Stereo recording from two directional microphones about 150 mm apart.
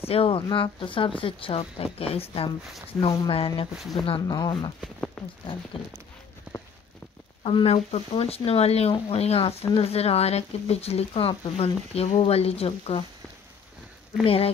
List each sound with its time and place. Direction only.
0.1 s speech: 35° left (ahead or behind)
4.8 s speech: 10° left (ahead or behind)
6.5 s walk: 10° right (ahead or behind)
7.4 s speech: 40° left (ahead or behind)
14.2 s speech: 40° left (ahead or behind)